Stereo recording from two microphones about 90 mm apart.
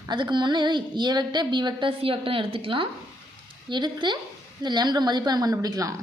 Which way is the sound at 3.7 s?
60° right (ahead or behind).